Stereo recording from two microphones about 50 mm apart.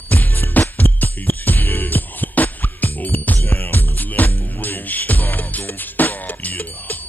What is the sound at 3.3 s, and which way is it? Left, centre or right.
Music, left.